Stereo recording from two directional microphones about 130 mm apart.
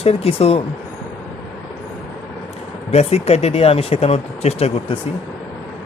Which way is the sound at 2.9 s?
55° left (ahead or behind).